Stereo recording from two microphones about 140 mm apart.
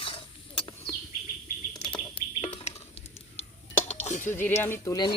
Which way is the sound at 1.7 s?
35° left (ahead or behind).